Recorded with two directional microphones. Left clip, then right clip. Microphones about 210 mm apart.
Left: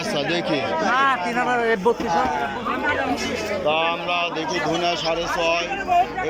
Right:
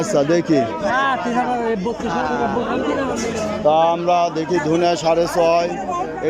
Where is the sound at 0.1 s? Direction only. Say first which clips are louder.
Right 6 dB; 30° right (ahead or behind).